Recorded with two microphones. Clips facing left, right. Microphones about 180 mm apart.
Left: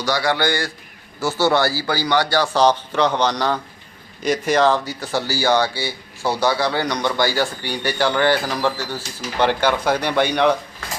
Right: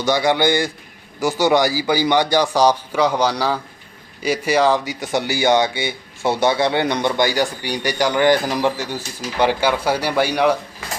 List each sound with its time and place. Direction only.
0.0 s a man's voice: 20° right (ahead or behind)